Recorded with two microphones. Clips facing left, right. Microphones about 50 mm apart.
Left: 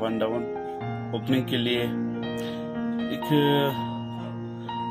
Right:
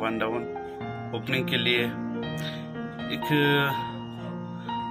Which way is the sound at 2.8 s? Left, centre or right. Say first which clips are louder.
Left 9 dB; centre.